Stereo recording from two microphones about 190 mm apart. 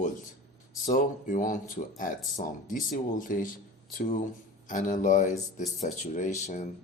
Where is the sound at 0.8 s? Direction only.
40° left (ahead or behind).